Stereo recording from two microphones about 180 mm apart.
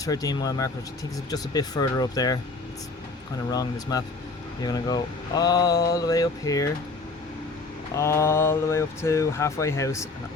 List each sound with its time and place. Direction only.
0.0 s speech: 20° left (ahead or behind)
3.5 s speech: 20° left (ahead or behind)
7.9 s speech: 15° left (ahead or behind)